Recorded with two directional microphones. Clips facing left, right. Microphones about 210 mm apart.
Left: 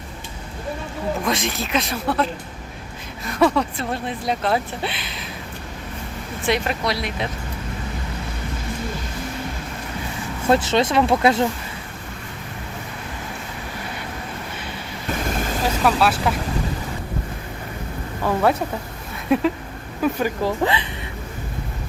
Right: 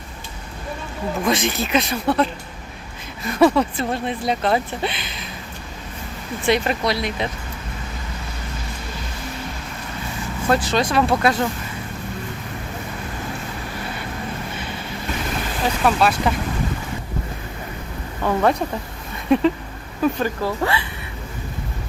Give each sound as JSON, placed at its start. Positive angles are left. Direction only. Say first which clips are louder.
{"t": 1.2, "sound": "speech", "louder": "right 3 dB", "side_deg": 0}
{"t": 3.2, "sound": "speech", "louder": "right 3 dB", "side_deg": 0}
{"t": 6.4, "sound": "speech", "louder": "right 3 dB", "side_deg": 0}
{"t": 10.5, "sound": "speech", "louder": "left 2 dB", "side_deg": 25}
{"t": 15.6, "sound": "speech", "louder": "right 1 dB", "side_deg": 5}
{"t": 18.2, "sound": "a woman's voice", "louder": "right 1 dB", "side_deg": 5}